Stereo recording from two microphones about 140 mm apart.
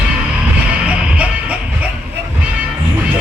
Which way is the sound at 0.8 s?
10° right (ahead or behind).